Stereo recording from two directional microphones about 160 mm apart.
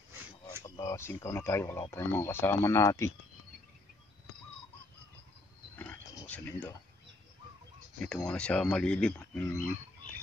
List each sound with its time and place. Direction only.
0.7 s speech: 20° left (ahead or behind)
5.8 s a sound: 10° left (ahead or behind)
8.0 s speech: 5° left (ahead or behind)